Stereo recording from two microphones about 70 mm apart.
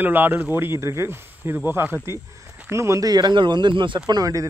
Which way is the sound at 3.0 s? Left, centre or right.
Right.